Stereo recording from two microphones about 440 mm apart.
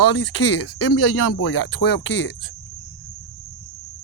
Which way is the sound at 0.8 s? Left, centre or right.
Left.